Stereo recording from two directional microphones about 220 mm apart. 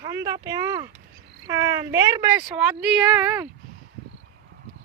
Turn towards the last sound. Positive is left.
turn(degrees=-5)  # may be behind; listen again after turning